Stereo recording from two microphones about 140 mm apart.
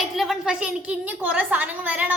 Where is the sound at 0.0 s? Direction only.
Centre (ahead or behind).